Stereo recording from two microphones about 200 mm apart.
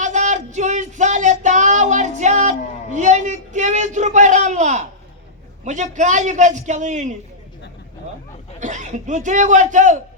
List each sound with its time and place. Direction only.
0.0 s music: 35° right (ahead or behind)
5.6 s a man's voice: 35° right (ahead or behind)
8.5 s a man's voice: 35° right (ahead or behind)